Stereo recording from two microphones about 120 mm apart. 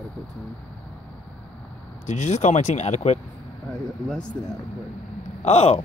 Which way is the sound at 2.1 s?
75° left (ahead or behind).